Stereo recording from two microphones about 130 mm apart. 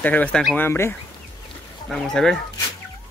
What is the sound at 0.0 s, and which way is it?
Speech, 10° left (ahead or behind).